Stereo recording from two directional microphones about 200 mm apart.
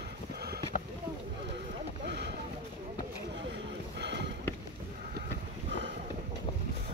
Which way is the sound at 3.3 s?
60° right (ahead or behind).